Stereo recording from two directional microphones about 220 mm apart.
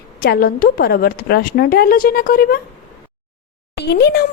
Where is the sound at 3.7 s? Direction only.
45° left (ahead or behind).